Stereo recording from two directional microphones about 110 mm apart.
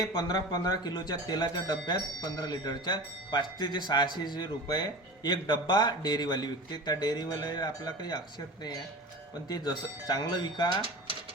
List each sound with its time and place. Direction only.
0.2 s speech: 35° left (ahead or behind)
9.5 s speech: 35° left (ahead or behind)